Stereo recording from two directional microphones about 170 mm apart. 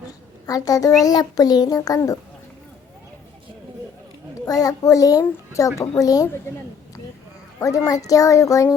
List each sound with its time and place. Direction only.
0.4 s a child's voice: 20° left (ahead or behind)
4.4 s a child's voice: 20° left (ahead or behind)
7.6 s a child's voice: 20° left (ahead or behind)